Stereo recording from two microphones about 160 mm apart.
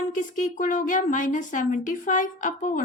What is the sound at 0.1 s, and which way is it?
Speech, 55° left (ahead or behind).